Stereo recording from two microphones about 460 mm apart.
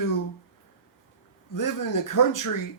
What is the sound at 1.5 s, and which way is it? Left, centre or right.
Speech, left.